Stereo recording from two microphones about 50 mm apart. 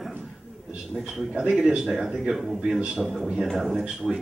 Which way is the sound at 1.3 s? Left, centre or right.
Centre.